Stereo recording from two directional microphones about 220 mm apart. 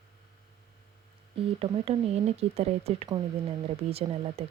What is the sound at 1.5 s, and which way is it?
Speech, 25° right (ahead or behind).